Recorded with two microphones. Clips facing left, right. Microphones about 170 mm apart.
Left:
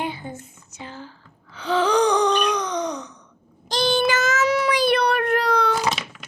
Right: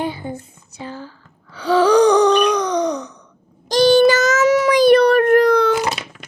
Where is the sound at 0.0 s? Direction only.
35° right (ahead or behind).